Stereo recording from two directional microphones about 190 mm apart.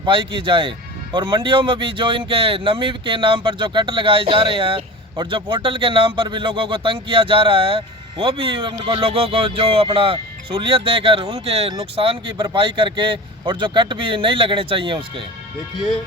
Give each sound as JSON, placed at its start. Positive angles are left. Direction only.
{"t": 0.0, "sound": "speech", "side_deg": -25}